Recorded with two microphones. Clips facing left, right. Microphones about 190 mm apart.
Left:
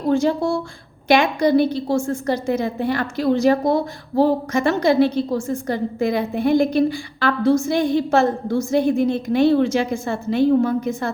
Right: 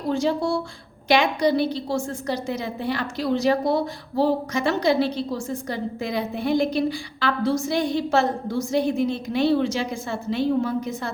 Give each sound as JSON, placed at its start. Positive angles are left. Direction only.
{"t": 0.1, "sound": "a woman's voice", "side_deg": 50}